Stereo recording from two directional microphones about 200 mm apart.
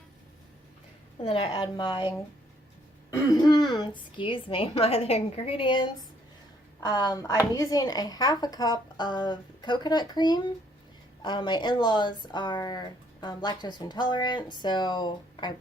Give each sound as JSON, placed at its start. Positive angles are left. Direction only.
{"t": 1.2, "sound": "a woman's voice", "side_deg": 30}